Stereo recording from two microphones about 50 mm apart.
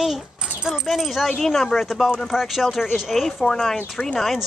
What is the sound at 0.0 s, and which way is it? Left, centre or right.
Keys jangling, centre.